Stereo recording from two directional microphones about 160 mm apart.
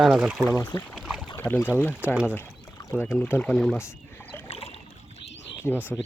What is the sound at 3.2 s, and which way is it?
Speech, 10° left (ahead or behind).